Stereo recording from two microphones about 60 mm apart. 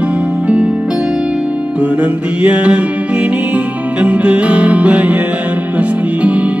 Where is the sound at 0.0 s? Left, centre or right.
Right.